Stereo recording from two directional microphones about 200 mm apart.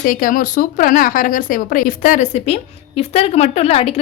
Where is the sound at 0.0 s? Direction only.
45° left (ahead or behind).